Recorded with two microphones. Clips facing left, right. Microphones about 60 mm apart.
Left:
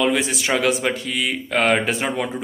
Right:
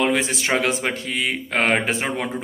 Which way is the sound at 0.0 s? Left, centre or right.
Right.